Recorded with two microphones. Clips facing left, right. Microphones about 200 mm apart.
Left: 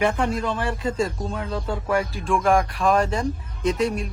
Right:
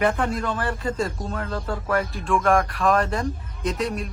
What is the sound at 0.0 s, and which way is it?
Speech, centre (ahead or behind).